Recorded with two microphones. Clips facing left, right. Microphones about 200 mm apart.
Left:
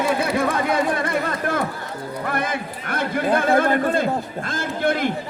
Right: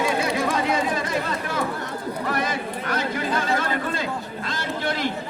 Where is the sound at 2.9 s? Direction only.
55° left (ahead or behind).